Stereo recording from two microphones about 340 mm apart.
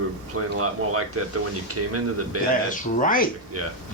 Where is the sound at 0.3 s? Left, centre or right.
Right.